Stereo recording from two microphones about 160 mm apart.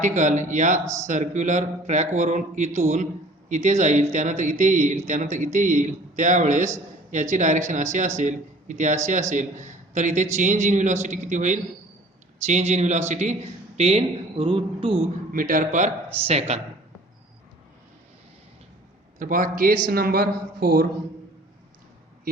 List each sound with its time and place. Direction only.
0.0 s a man's voice: 50° right (ahead or behind); by 15.0 s 35° right (ahead or behind)
15.3 s a man's voice: 60° right (ahead or behind)
16.2 s speech: 40° right (ahead or behind)
19.2 s a man's voice: 55° right (ahead or behind)